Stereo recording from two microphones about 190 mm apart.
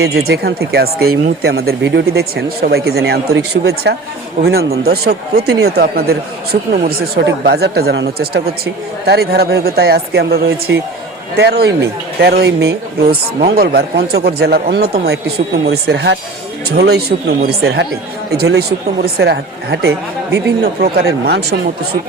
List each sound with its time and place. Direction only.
0.0 s speech: 60° right (ahead or behind)